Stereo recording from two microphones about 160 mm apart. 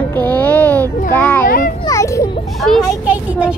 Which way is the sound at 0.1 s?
10° left (ahead or behind).